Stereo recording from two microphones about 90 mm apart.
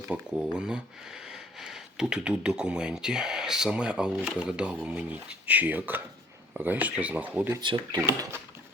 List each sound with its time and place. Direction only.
0.3 s speech: 10° right (ahead or behind)
7.6 s speech: 60° right (ahead or behind)